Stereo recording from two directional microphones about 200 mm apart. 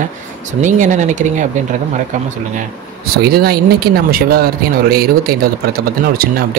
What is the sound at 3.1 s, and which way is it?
Speech, 50° right (ahead or behind).